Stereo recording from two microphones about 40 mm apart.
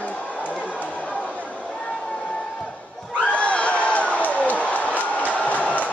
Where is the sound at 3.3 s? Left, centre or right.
Left.